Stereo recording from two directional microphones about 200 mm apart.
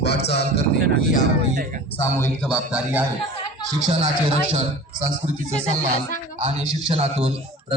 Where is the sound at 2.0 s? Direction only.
10° left (ahead or behind).